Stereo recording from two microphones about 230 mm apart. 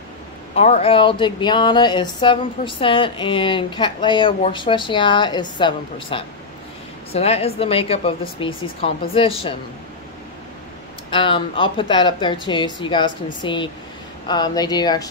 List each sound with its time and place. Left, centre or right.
0.6 s speech: left
11.1 s speech: left